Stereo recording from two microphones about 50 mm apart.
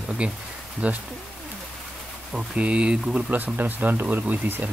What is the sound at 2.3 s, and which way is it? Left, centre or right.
Speech, right.